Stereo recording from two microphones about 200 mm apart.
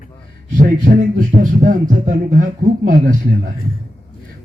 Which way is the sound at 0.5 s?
40° right (ahead or behind).